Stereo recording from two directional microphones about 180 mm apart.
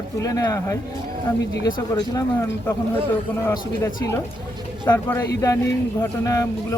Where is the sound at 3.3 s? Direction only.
15° left (ahead or behind).